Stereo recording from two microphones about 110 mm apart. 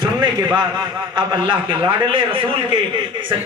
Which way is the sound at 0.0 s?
40° right (ahead or behind).